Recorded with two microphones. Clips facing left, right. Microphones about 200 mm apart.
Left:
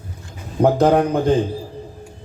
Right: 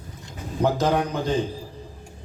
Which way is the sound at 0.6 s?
55° left (ahead or behind).